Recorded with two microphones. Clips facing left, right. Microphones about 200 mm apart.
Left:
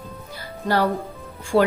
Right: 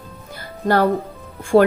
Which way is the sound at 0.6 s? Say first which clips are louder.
Right 4 dB; 50° right (ahead or behind).